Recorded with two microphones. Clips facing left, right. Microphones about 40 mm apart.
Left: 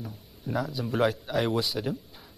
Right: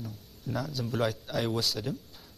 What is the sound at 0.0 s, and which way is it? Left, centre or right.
Speech, centre.